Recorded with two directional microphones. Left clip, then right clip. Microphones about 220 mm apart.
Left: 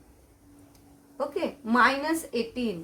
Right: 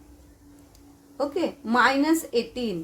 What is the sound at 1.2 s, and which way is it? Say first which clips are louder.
A woman's voice: right 3 dB; 30° right (ahead or behind).